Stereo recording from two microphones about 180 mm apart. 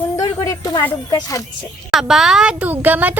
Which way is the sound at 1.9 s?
Centre (ahead or behind).